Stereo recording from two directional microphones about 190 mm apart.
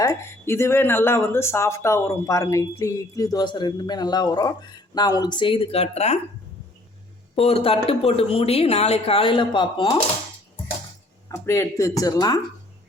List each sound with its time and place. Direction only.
0.0 s speech: 15° left (ahead or behind); by 6.1 s 35° left (ahead or behind)
7.3 s speech: 30° left (ahead or behind)
11.4 s speech: 15° left (ahead or behind)